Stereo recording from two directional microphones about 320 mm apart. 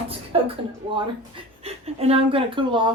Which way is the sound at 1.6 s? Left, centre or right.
Centre.